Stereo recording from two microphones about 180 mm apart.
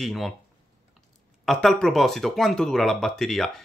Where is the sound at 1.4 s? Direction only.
Centre (ahead or behind).